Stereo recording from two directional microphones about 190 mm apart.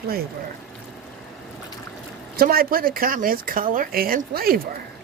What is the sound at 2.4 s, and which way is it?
Speech, 50° right (ahead or behind).